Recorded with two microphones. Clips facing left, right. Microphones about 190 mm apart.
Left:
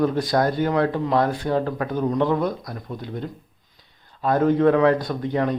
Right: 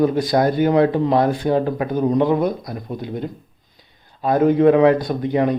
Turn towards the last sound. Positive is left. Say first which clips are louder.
# right 4 dB
turn(degrees=-15)  # may be behind; listen again after turning